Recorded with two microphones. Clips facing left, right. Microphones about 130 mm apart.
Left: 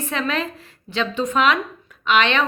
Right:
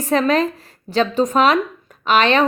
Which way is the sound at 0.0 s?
40° right (ahead or behind).